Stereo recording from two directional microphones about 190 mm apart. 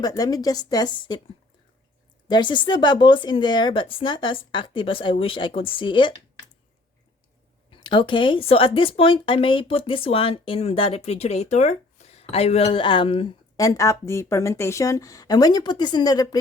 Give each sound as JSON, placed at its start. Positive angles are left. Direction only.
{"t": 0.0, "sound": "speech", "side_deg": 20}
{"t": 2.2, "sound": "speech", "side_deg": 25}
{"t": 7.7, "sound": "speech", "side_deg": 25}